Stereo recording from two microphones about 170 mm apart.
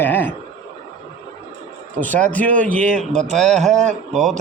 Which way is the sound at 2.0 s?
10° left (ahead or behind).